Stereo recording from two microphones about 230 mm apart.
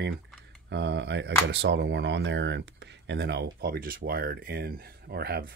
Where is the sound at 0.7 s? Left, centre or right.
Right.